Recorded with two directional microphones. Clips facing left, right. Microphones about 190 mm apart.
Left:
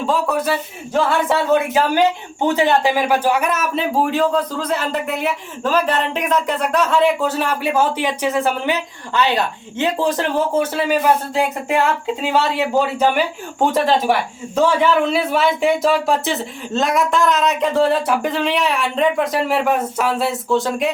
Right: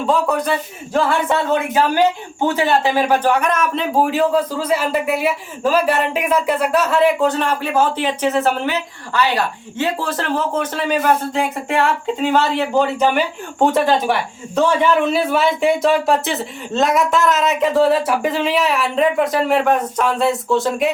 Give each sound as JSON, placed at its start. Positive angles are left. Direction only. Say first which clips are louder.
{"t": 0.0, "sound": "a man's voice", "louder": "right 1 dB", "side_deg": 0}
{"t": 2.5, "sound": "a man's voice", "louder": "left 1 dB", "side_deg": 15}